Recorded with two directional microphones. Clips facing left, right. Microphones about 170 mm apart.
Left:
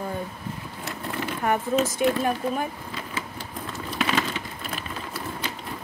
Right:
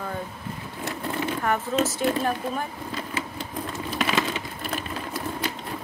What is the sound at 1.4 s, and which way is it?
Speech, 15° left (ahead or behind).